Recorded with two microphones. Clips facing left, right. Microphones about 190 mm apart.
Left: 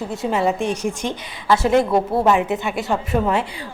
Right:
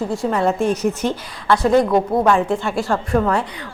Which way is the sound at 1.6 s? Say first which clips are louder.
Right 2 dB; 25° left (ahead or behind).